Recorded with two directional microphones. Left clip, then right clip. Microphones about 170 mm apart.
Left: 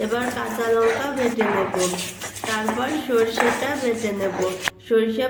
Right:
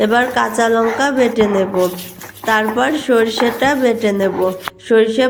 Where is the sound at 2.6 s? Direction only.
50° right (ahead or behind).